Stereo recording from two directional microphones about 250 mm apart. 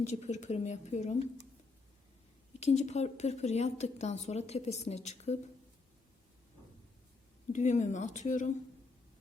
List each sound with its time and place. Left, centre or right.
0.0 s a woman's voice: left
2.6 s a woman's voice: left
7.5 s a woman's voice: left